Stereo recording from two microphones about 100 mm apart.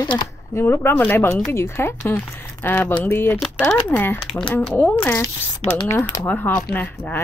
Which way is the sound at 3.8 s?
20° left (ahead or behind).